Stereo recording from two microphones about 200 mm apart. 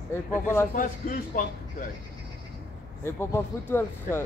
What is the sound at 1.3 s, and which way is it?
Speech, 40° left (ahead or behind).